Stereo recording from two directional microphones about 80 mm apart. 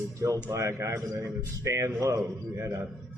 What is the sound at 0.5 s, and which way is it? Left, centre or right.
A man's voice, right.